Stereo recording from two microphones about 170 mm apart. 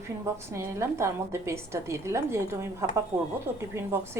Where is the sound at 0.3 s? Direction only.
15° right (ahead or behind).